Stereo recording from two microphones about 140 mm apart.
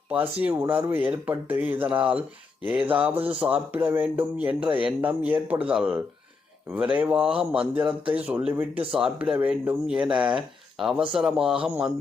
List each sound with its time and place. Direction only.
0.1 s speech: 10° right (ahead or behind)
7.8 s speech: 35° right (ahead or behind)
8.1 s speech: 10° right (ahead or behind)